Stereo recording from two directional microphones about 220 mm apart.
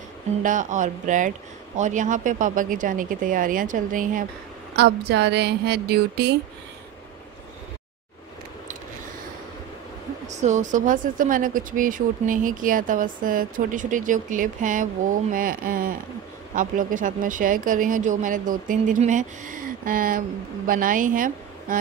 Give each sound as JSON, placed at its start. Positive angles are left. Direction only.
{"t": 0.4, "sound": "speech", "side_deg": -35}
{"t": 4.7, "sound": "speech", "side_deg": -50}
{"t": 10.2, "sound": "speech", "side_deg": -30}